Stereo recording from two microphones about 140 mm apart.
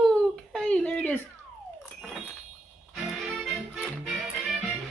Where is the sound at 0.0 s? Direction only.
5° left (ahead or behind).